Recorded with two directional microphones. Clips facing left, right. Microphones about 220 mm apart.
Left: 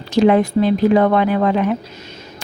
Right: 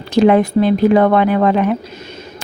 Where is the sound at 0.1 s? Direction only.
55° right (ahead or behind).